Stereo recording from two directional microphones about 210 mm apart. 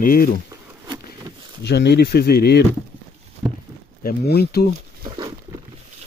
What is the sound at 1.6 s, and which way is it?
Speech, 50° left (ahead or behind).